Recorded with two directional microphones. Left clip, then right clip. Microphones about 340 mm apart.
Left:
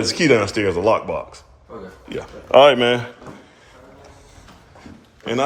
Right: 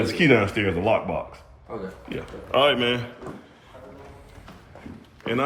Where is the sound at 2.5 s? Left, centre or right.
Left.